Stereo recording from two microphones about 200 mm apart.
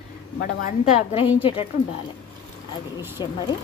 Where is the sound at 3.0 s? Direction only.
10° right (ahead or behind).